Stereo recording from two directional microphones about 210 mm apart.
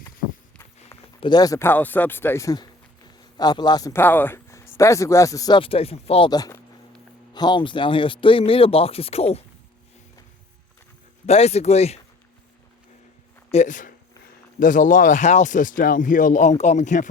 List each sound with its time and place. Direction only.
1.2 s speech: 20° left (ahead or behind)
11.3 s speech: 30° left (ahead or behind)
13.5 s speech: 35° left (ahead or behind)